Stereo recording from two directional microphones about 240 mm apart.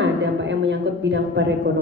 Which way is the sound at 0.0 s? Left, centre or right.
Right.